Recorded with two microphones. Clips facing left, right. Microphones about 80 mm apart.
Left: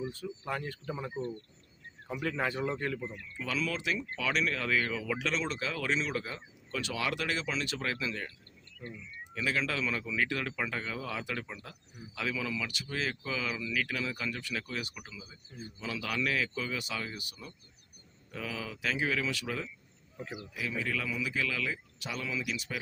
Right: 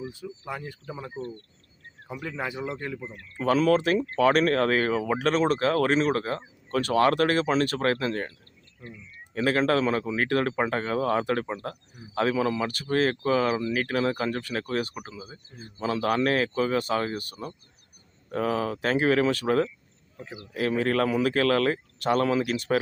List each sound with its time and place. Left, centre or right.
0.0 s speech: centre
3.3 s speech: right
9.3 s speech: right